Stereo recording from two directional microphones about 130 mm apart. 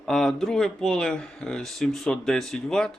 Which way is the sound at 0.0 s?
5° left (ahead or behind).